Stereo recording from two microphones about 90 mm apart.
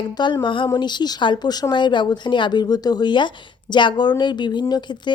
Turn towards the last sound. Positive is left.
turn(degrees=55)  # may be behind; listen again after turning